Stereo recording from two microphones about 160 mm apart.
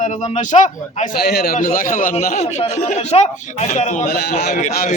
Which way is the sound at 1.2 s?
90° left.